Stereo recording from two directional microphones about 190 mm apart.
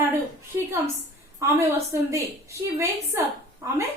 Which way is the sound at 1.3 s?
15° right (ahead or behind).